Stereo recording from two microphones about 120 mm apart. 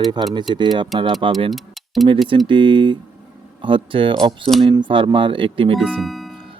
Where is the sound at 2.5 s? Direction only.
45° right (ahead or behind).